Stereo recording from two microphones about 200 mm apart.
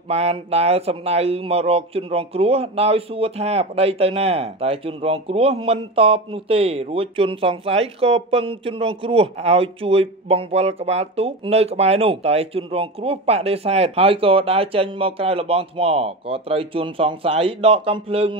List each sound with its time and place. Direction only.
0.1 s speech: 30° right (ahead or behind)